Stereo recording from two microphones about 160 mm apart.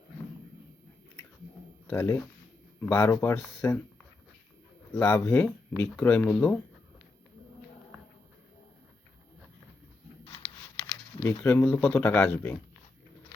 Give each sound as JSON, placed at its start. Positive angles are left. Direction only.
{"t": 1.9, "sound": "speech", "side_deg": 15}
{"t": 4.9, "sound": "speech", "side_deg": 15}
{"t": 10.2, "sound": "a sound", "side_deg": 30}
{"t": 11.2, "sound": "speech", "side_deg": 15}